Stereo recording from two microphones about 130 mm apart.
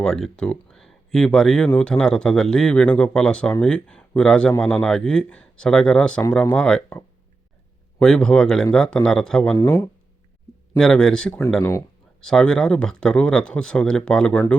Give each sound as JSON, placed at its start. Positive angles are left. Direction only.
{"t": 0.0, "sound": "speech", "side_deg": 5}
{"t": 9.6, "sound": "speech", "side_deg": 20}
{"t": 10.8, "sound": "speech", "side_deg": 5}